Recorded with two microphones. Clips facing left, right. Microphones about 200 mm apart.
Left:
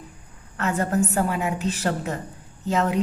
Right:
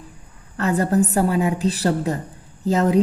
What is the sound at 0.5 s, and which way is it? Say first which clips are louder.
A woman's voice: right 4 dB; 35° right (ahead or behind).